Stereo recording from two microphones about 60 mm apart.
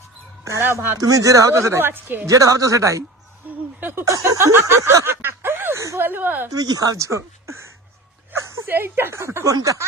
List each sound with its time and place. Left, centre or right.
0.6 s a woman's voice: right
0.9 s speech: right
1.9 s a woman's voice: right
2.2 s speech: right
3.8 s speech: right
4.0 s speech: right
4.4 s a sound: right
4.8 s speech: right
5.0 s a sound: right
6.0 s a woman's voice: right
6.5 s speech: right
8.3 s speech: right
9.5 s speech: right